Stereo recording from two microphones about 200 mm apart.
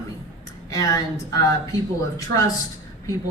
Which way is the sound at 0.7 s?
15° left (ahead or behind).